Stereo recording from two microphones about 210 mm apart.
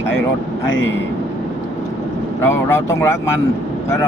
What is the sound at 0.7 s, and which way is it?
Speech, 65° left (ahead or behind).